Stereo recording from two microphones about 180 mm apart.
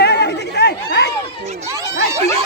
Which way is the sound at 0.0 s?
65° left (ahead or behind).